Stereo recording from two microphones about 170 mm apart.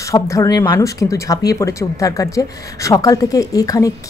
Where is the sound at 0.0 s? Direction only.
20° left (ahead or behind).